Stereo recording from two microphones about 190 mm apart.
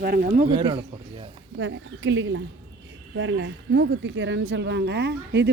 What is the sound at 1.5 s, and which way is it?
Speech, 80° right.